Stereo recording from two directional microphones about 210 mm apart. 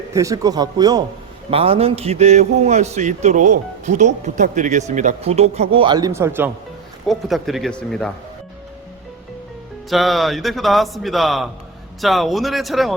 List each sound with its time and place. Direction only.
0.1 s speech: 15° right (ahead or behind)
7.1 s a man's voice: centre (ahead or behind)
9.9 s a man's voice: centre (ahead or behind)